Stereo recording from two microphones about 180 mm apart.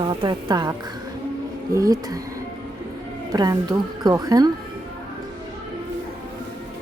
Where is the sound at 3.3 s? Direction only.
20° right (ahead or behind).